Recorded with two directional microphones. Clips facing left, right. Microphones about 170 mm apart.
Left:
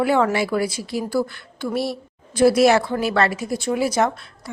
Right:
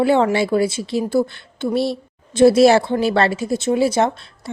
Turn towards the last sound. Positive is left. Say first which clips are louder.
# right 3 dB
turn(degrees=-25)  # may be behind; listen again after turning